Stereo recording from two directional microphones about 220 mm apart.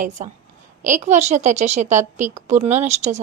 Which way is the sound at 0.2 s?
30° right (ahead or behind).